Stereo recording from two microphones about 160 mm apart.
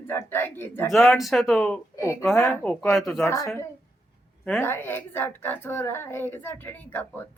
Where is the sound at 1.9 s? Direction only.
15° left (ahead or behind).